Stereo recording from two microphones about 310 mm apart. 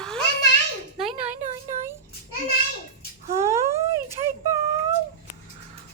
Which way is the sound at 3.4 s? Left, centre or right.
Centre.